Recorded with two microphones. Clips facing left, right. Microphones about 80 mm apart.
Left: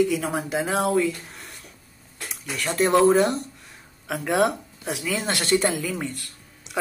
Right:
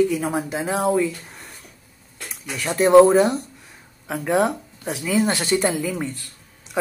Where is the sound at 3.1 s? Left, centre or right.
Centre.